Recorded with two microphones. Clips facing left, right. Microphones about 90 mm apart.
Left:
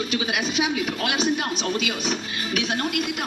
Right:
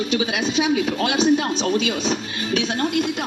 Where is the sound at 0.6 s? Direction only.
30° right (ahead or behind).